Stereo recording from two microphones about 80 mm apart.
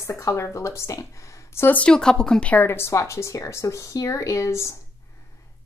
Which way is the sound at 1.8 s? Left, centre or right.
Centre.